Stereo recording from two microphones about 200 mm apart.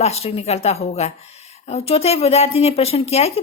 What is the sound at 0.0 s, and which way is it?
A woman's voice, 30° left (ahead or behind).